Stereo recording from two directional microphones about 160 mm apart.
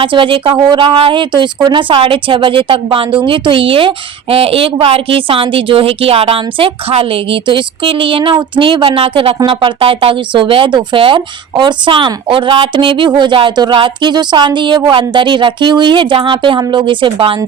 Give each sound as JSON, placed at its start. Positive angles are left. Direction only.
{"t": 0.0, "sound": "speech", "side_deg": -30}